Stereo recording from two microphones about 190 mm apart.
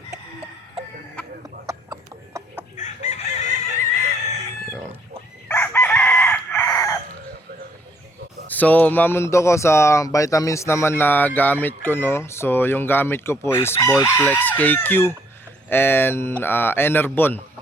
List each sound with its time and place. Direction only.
1.2 s music: 5° left (ahead or behind)
1.6 s chicken: 15° right (ahead or behind)
2.7 s chicken: 40° left (ahead or behind)
5.5 s chicken: 10° left (ahead or behind)
8.4 s speech: 10° left (ahead or behind)